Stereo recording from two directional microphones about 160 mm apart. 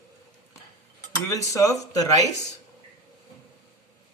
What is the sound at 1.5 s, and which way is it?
Speech, 20° left (ahead or behind).